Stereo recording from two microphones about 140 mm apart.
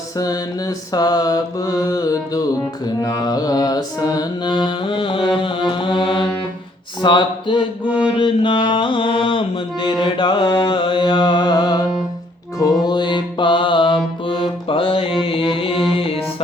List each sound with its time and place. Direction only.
0.2 s mantra: 25° left (ahead or behind)
7.0 s a sound: 35° left (ahead or behind)
7.9 s mantra: 10° right (ahead or behind)
8.2 s mantra: 35° left (ahead or behind)
12.8 s music: 30° left (ahead or behind)